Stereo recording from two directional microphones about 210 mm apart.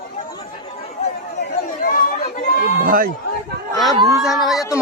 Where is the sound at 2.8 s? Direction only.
40° right (ahead or behind).